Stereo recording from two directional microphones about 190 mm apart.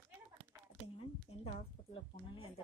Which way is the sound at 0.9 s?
30° left (ahead or behind).